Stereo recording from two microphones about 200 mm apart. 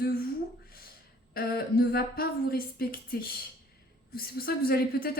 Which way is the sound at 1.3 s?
50° left (ahead or behind).